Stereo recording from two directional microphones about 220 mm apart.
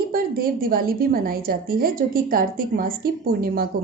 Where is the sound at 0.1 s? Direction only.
40° right (ahead or behind).